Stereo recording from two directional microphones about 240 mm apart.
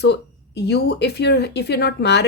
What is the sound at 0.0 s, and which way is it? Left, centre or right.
Speech, left.